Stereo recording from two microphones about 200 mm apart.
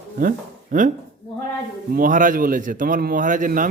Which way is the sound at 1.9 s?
45° right (ahead or behind).